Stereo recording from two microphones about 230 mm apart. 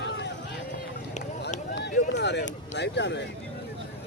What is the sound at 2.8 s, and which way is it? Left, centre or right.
Speech, left.